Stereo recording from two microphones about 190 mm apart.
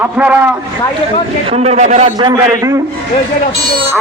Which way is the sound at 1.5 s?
35° right (ahead or behind).